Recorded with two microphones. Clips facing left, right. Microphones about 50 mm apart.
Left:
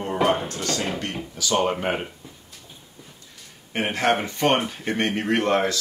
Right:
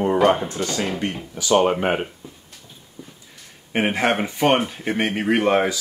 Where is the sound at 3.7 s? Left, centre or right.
Centre.